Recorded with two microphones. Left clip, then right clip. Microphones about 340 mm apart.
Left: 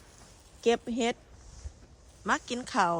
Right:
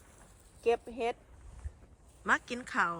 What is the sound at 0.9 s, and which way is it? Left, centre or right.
Speech, left.